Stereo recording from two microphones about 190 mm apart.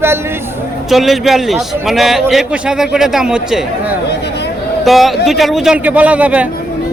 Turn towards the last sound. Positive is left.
turn(degrees=-5)  # may be behind; listen again after turning